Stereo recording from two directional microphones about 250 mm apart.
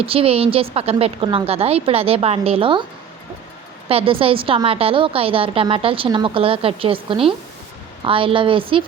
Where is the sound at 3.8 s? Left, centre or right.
Right.